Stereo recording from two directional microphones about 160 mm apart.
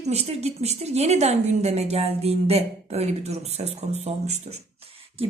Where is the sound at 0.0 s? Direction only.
40° right (ahead or behind).